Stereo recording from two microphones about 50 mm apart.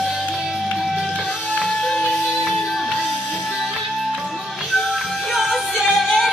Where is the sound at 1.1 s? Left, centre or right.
Centre.